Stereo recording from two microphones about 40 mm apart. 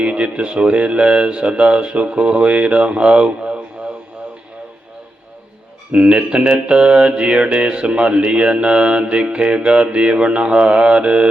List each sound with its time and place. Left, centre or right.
0.0 s mantra: right
5.9 s mantra: right